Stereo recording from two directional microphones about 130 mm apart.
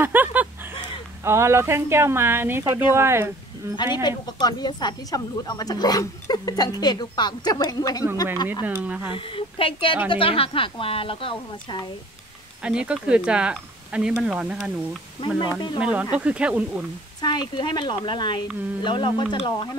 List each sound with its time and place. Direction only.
0.0 s speech: 15° right (ahead or behind)
3.7 s a woman's voice: 35° left (ahead or behind)
8.6 s speech: 10° right (ahead or behind)
9.1 s speech: 45° left (ahead or behind)
12.6 s speech: 5° right (ahead or behind)
15.2 s a woman's voice: 35° left (ahead or behind)
15.8 s speech: 10° right (ahead or behind)
17.2 s a woman's voice: 35° left (ahead or behind)